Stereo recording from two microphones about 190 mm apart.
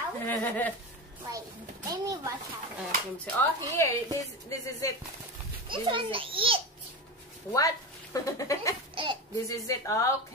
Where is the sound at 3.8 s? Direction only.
15° left (ahead or behind).